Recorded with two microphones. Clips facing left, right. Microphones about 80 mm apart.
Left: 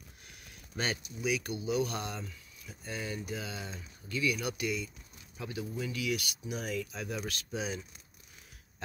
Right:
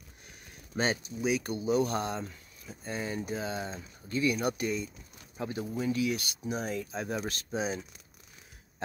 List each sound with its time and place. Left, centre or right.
0.7 s speech: right